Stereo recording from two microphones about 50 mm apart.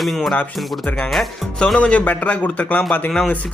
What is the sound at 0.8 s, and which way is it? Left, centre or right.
Speech, left.